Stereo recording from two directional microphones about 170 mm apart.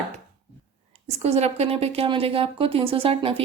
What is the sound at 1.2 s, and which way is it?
Speech, 40° right (ahead or behind).